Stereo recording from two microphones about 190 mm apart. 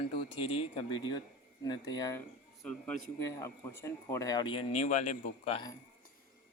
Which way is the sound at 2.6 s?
5° left (ahead or behind).